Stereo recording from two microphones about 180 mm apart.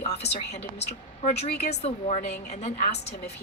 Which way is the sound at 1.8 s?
35° left (ahead or behind).